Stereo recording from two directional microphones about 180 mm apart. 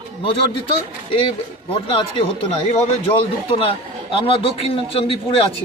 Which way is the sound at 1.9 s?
30° left (ahead or behind).